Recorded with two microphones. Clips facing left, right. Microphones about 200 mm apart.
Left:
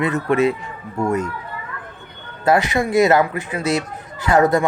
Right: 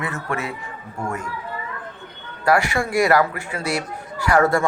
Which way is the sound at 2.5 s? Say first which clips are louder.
Left 2 dB; 20° left (ahead or behind).